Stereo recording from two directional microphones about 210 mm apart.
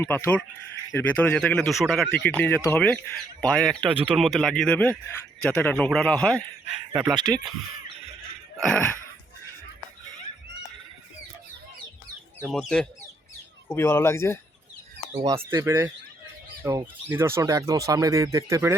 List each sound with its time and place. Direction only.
0.0 s a man's voice: 10° left (ahead or behind)
6.9 s speech: 15° right (ahead or behind)
8.6 s a man's voice: 5° left (ahead or behind)
12.4 s a man's voice: centre (ahead or behind)
15.1 s speech: 15° right (ahead or behind)